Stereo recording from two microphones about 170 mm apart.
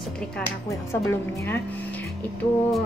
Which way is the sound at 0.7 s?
15° left (ahead or behind).